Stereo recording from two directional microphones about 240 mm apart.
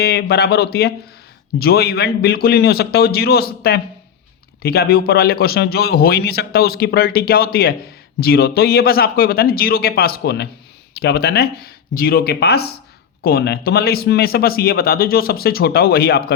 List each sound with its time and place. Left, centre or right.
0.0 s a man's voice: left